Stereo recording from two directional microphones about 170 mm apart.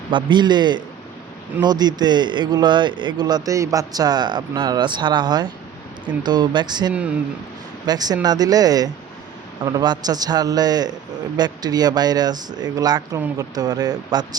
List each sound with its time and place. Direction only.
0.1 s a man's voice: 25° right (ahead or behind)
13.1 s speech: 10° right (ahead or behind)
13.6 s a man's voice: 25° right (ahead or behind)